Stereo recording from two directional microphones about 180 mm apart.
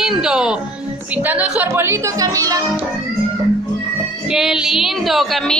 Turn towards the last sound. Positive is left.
turn(degrees=0)  # may be behind; listen again after turning